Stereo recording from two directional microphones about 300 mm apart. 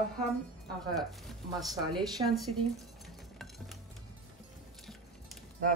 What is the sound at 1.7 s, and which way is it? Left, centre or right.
Speech, centre.